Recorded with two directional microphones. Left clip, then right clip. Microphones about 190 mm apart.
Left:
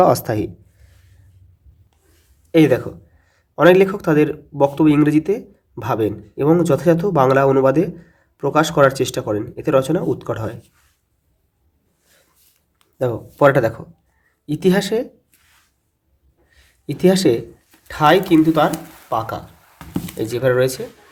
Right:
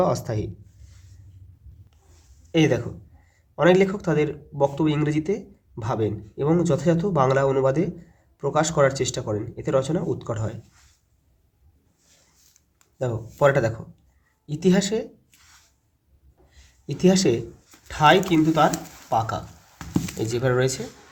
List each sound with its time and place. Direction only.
0.0 s speech: 45° left (ahead or behind)
2.5 s speech: 30° left (ahead or behind)
13.0 s speech: 35° left (ahead or behind)
16.8 s speech: 25° left (ahead or behind)